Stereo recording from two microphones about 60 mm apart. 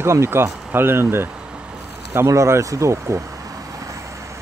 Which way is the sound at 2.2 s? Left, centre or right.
Right.